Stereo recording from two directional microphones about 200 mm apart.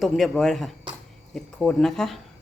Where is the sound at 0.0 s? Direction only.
Centre (ahead or behind).